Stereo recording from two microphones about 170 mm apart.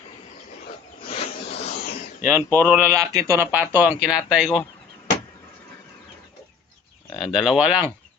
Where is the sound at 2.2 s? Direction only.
10° right (ahead or behind).